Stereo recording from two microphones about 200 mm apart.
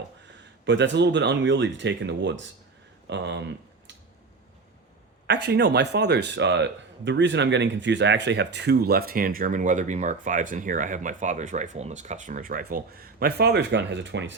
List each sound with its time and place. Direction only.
0.6 s speech: 60° right (ahead or behind)
5.2 s speech: 55° right (ahead or behind)